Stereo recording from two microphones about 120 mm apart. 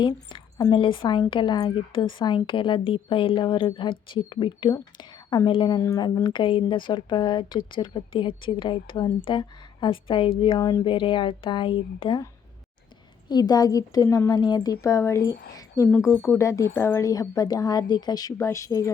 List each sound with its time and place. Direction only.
0.0 s a woman's voice: 40° left (ahead or behind)
4.7 s a woman's voice: 30° left (ahead or behind)
13.2 s a woman's voice: 35° left (ahead or behind)